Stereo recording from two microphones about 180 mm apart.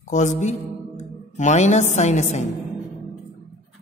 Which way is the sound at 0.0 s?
40° left (ahead or behind).